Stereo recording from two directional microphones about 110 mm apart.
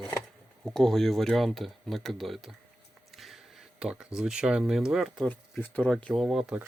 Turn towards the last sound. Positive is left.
turn(degrees=-5)  # may be behind; listen again after turning